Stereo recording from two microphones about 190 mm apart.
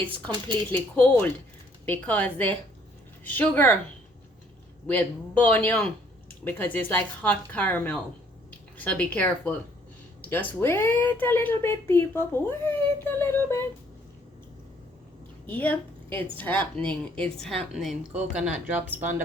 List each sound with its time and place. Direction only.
0.3 s speech: 25° right (ahead or behind)
0.7 s speech: 10° left (ahead or behind)
4.9 s speech: 10° left (ahead or behind)
15.4 s speech: 10° left (ahead or behind)
16.0 s a woman's voice: 30° right (ahead or behind)
16.4 s a woman's voice: 10° left (ahead or behind); by 19.1 s 10° right (ahead or behind)